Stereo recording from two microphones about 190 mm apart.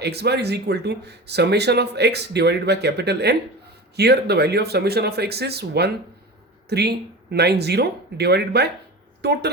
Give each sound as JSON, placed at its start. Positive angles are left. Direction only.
{"t": 0.0, "sound": "speech", "side_deg": -60}